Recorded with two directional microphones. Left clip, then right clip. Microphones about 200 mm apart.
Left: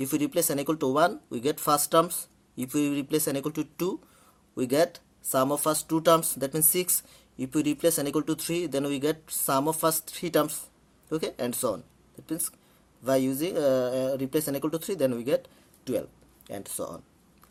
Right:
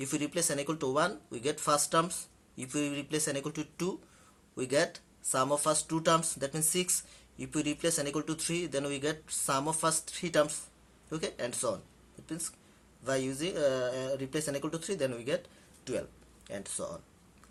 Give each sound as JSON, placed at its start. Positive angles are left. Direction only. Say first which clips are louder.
{"t": 0.0, "sound": "speech", "louder": "left 6 dB", "side_deg": 50}